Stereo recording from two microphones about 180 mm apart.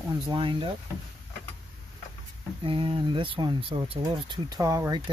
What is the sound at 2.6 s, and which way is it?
Speech, 30° right (ahead or behind).